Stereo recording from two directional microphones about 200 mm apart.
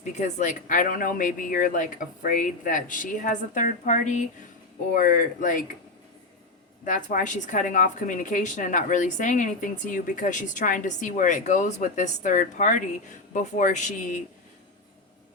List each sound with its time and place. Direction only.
0.0 s a woman's voice: 35° left (ahead or behind)
6.8 s a woman's voice: 40° left (ahead or behind)